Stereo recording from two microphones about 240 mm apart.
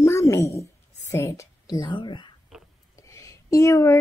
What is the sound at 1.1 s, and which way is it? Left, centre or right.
A woman's voice, centre.